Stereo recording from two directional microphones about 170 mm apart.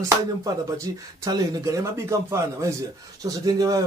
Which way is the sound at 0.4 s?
20° right (ahead or behind).